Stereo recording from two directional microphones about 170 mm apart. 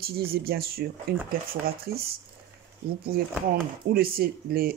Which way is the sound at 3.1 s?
60° right (ahead or behind).